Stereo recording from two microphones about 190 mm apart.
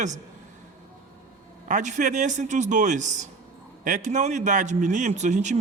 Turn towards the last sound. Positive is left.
turn(degrees=-40)  # may be behind; listen again after turning